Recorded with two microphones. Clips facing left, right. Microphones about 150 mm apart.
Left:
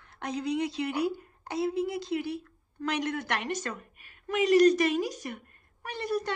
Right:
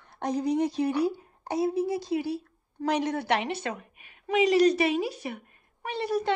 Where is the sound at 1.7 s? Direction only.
60° left (ahead or behind).